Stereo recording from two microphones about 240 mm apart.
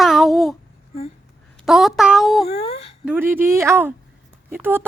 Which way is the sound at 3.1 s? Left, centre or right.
Centre.